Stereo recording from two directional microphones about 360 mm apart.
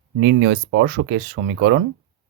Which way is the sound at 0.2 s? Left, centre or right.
Right.